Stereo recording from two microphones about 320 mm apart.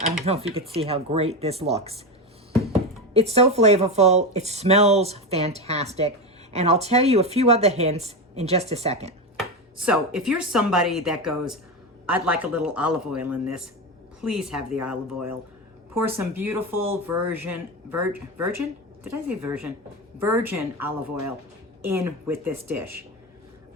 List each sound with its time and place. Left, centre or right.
0.3 s a woman's voice: centre
3.1 s a woman's voice: centre
9.8 s a woman's voice: centre
16.0 s speech: centre